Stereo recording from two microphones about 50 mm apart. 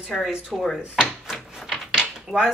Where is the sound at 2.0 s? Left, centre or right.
Centre.